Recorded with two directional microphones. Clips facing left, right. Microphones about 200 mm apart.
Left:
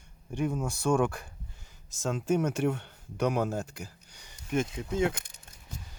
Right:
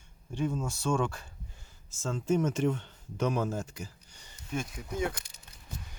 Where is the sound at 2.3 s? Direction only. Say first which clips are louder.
Right 1 dB; 65° left (ahead or behind).